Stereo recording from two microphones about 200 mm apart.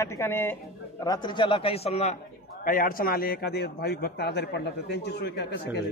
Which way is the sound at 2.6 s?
45° left (ahead or behind).